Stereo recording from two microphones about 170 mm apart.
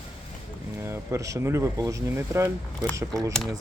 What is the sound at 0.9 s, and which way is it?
Speech, 15° right (ahead or behind).